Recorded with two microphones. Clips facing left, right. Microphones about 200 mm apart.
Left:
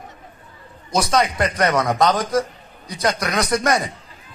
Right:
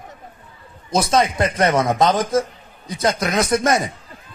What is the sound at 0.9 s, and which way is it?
A man's voice, 25° right (ahead or behind).